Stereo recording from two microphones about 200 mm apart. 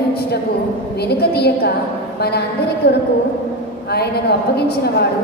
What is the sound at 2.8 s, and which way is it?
Speech, 55° left (ahead or behind).